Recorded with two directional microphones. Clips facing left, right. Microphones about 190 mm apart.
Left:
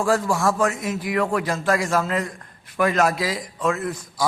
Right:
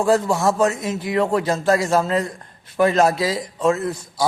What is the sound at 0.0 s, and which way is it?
A man's voice, 20° right (ahead or behind).